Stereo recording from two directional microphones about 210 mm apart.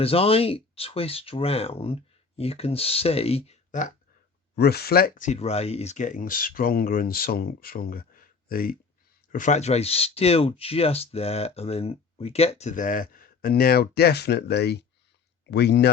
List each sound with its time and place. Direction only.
0.0 s speech: 25° left (ahead or behind)
4.5 s speech: 50° left (ahead or behind)